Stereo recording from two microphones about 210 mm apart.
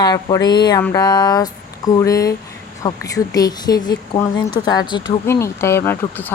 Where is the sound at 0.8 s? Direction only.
20° left (ahead or behind).